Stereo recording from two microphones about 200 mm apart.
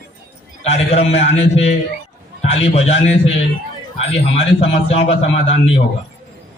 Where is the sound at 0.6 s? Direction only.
35° left (ahead or behind).